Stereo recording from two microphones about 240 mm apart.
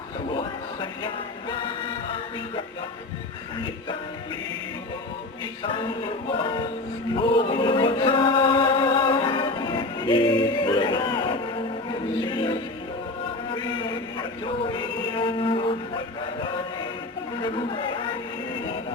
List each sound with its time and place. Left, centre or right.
0.3 s music: centre
5.6 s music: left
17.4 s speech: left